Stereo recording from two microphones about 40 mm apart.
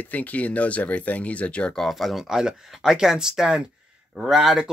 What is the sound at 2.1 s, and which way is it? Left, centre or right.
Speech, centre.